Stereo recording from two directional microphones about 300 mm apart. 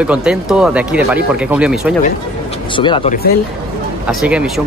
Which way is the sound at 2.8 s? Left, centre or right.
Centre.